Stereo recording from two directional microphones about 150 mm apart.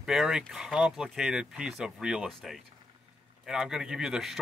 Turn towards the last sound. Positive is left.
turn(degrees=-5)  # may be behind; listen again after turning